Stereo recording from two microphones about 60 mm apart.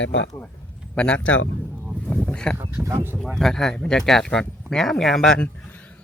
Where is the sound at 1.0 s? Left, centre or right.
Left.